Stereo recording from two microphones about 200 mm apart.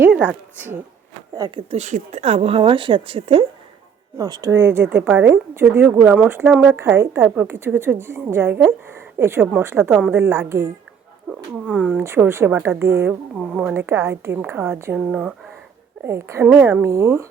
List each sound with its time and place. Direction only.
0.0 s speech: 5° right (ahead or behind)
1.4 s a woman's voice: 25° right (ahead or behind)
11.6 s a woman's voice: centre (ahead or behind)